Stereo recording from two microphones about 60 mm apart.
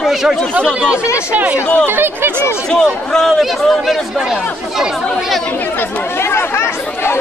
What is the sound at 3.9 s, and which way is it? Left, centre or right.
Speech, centre.